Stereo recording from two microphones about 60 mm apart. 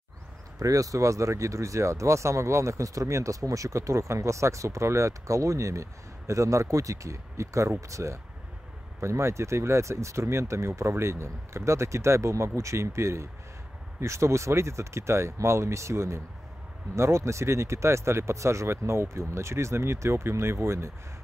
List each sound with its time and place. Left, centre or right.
0.6 s speech: right